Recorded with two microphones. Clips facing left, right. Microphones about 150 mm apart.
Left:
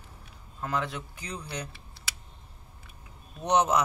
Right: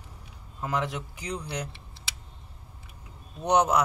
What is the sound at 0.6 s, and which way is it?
Speech, 15° right (ahead or behind).